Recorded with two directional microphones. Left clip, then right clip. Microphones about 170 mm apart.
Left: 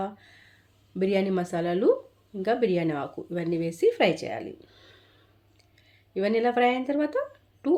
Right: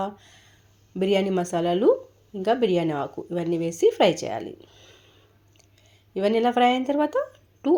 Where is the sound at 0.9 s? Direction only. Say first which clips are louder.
Right 3 dB; 15° right (ahead or behind).